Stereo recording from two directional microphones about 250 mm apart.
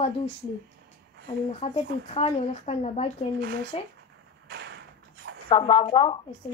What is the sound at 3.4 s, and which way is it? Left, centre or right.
Speech, right.